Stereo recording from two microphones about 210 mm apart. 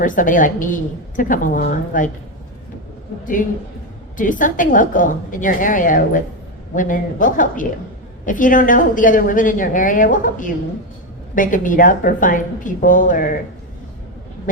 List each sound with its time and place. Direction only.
0.0 s a woman's voice: 40° left (ahead or behind)
4.2 s a woman's voice: 40° left (ahead or behind)